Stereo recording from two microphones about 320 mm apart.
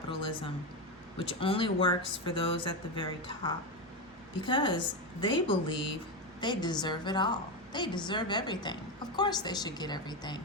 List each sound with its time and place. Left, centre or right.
0.1 s music: centre
1.2 s a woman's voice: centre